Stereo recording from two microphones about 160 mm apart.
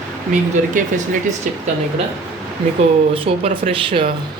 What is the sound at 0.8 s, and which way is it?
Speech, 55° right (ahead or behind).